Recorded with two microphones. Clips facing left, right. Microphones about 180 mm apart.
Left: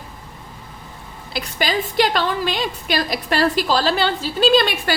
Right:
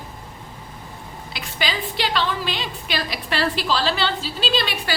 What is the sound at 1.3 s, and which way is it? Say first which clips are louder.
A woman's voice: left 5 dB; 40° left (ahead or behind).